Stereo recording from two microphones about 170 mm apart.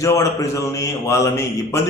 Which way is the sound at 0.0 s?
20° left (ahead or behind).